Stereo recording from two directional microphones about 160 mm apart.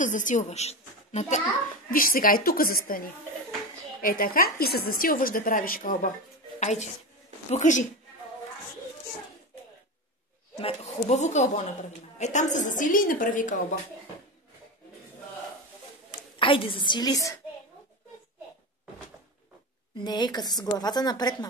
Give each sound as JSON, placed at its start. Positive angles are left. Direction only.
{"t": 0.0, "sound": "a woman's voice", "side_deg": 55}
{"t": 1.9, "sound": "a woman's voice", "side_deg": 65}
{"t": 6.6, "sound": "a woman's voice", "side_deg": 45}
{"t": 10.6, "sound": "a woman's voice", "side_deg": 40}
{"t": 16.3, "sound": "a woman's voice", "side_deg": 35}
{"t": 20.0, "sound": "a woman's voice", "side_deg": 25}